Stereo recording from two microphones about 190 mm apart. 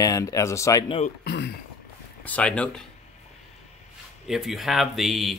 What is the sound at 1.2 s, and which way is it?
Speech, 65° left (ahead or behind).